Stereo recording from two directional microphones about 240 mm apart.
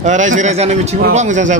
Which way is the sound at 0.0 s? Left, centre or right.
Right.